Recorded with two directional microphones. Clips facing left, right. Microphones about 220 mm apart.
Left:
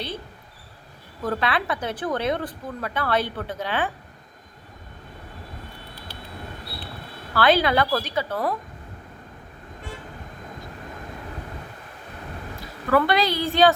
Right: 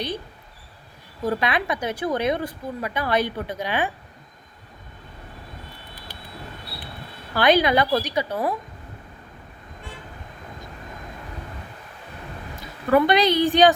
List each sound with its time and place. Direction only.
1.2 s speech: 15° right (ahead or behind)
7.3 s speech: 15° right (ahead or behind)
12.9 s speech: 20° right (ahead or behind)